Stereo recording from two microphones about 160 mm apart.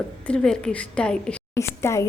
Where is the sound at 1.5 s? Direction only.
20° left (ahead or behind).